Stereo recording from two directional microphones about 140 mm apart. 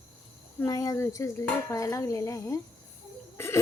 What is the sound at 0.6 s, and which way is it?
Speech, 25° left (ahead or behind).